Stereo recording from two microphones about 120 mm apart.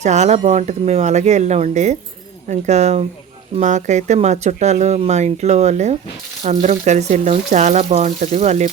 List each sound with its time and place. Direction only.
0.0 s speech: 70° right (ahead or behind)
3.6 s speech: 85° right